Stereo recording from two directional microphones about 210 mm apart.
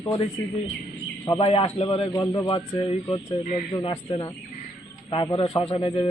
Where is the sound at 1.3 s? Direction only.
25° left (ahead or behind).